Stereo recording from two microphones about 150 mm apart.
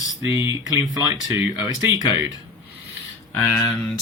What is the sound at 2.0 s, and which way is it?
Speech, 15° right (ahead or behind).